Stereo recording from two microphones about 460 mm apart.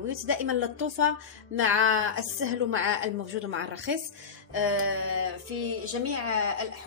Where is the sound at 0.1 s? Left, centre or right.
Right.